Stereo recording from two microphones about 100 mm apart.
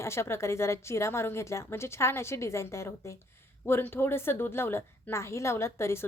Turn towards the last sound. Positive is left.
turn(degrees=25)  # may be behind; listen again after turning